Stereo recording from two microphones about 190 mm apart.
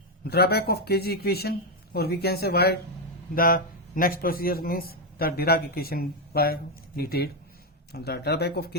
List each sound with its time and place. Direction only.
0.3 s a man's voice: 55° left (ahead or behind)